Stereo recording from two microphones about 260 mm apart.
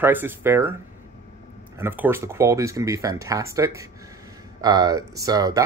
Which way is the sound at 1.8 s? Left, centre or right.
Centre.